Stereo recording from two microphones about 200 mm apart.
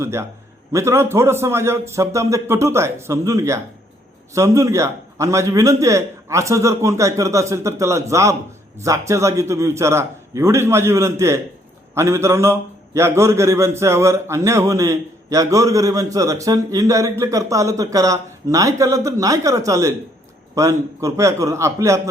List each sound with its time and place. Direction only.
0.0 s a man's voice: 15° right (ahead or behind)